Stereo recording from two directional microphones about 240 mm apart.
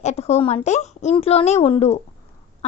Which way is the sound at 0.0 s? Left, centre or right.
Left.